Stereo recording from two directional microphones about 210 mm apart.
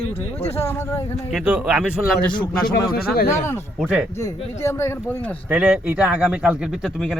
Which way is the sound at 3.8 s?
5° right (ahead or behind).